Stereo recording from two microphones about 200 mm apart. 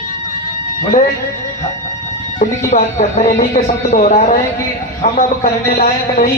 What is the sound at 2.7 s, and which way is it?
A man's voice, 35° left (ahead or behind).